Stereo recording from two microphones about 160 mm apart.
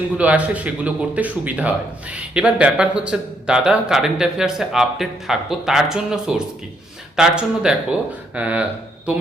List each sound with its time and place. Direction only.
0.2 s speech: 10° right (ahead or behind)